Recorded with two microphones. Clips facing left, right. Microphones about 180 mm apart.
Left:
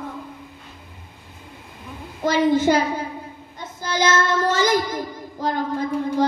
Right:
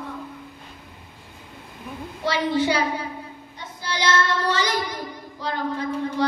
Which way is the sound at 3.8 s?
45° left (ahead or behind).